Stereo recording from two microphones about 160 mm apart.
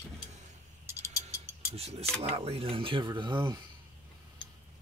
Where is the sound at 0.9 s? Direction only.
15° right (ahead or behind).